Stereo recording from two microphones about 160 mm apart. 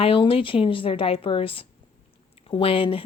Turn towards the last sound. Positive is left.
turn(degrees=35)  # may be behind; listen again after turning